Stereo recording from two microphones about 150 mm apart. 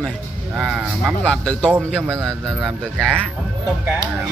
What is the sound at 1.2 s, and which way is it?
Speech, 5° left (ahead or behind).